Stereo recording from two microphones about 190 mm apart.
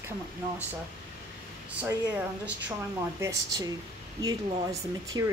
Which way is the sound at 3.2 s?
20° right (ahead or behind).